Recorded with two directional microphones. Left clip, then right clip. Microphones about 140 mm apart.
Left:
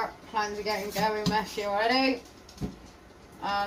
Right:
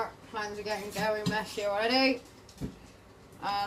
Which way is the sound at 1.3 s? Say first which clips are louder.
Left 3 dB; centre (ahead or behind).